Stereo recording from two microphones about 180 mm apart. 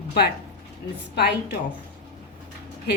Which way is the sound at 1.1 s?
65° left (ahead or behind).